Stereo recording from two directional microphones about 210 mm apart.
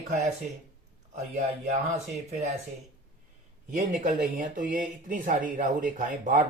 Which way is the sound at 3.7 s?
35° right (ahead or behind).